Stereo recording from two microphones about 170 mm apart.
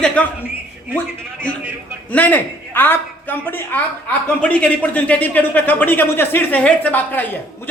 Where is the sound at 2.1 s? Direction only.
10° left (ahead or behind).